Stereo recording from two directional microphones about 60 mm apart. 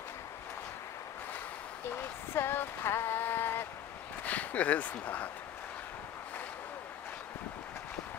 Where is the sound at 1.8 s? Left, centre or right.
Left.